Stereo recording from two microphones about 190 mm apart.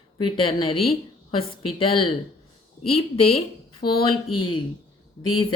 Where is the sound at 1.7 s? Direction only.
25° left (ahead or behind).